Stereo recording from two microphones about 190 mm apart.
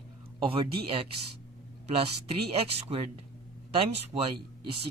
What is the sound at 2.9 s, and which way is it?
Speech, 30° right (ahead or behind).